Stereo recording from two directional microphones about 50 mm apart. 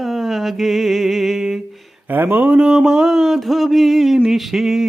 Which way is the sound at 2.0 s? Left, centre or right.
Right.